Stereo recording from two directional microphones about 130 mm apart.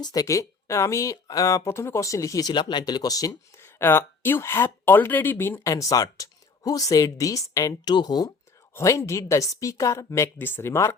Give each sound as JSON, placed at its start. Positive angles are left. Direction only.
{"t": 0.0, "sound": "speech", "side_deg": 30}
{"t": 8.7, "sound": "speech", "side_deg": 20}